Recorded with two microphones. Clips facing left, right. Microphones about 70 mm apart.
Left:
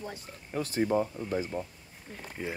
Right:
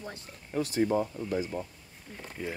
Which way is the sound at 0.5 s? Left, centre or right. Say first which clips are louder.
Right 1 dB; left.